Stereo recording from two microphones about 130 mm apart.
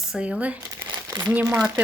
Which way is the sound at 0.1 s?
10° right (ahead or behind).